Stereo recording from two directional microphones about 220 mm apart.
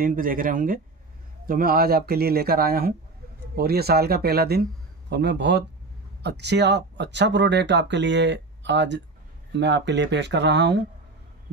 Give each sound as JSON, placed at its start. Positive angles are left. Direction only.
{"t": 0.0, "sound": "speech", "side_deg": -40}